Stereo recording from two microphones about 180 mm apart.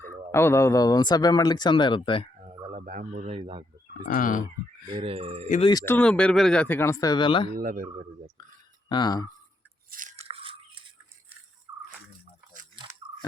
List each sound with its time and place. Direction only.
0.3 s speech: 15° left (ahead or behind)
2.4 s dog: 35° right (ahead or behind)
2.8 s speech: 45° right (ahead or behind); by 3.7 s 30° right (ahead or behind)
4.1 s speech: 50° left (ahead or behind)
4.9 s speech: 30° right (ahead or behind)
5.8 s speech: 10° left (ahead or behind); by 7.5 s 25° left (ahead or behind)
7.5 s speech: 50° right (ahead or behind)
8.9 s speech: 25° left (ahead or behind)
9.9 s crunch: 45° right (ahead or behind)